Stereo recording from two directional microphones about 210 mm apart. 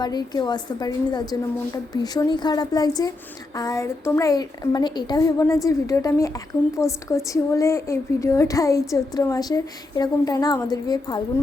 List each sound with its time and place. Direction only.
0.0 s a woman's voice: 20° left (ahead or behind)